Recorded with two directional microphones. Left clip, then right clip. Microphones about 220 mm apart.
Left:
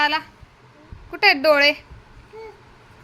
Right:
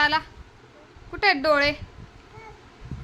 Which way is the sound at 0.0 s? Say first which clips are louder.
Left 1 dB; 5° left (ahead or behind).